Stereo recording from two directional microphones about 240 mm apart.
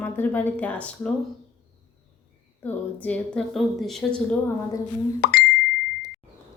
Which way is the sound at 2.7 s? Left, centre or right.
Centre.